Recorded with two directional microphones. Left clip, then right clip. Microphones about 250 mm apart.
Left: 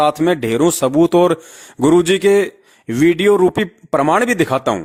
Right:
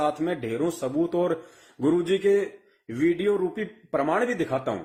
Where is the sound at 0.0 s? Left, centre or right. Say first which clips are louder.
Left 12 dB; left.